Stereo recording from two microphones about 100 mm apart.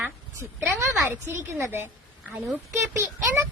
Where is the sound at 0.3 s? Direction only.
30° right (ahead or behind).